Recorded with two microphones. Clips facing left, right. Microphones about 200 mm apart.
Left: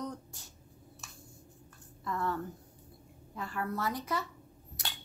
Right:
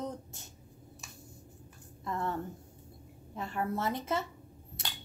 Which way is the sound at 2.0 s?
25° right (ahead or behind).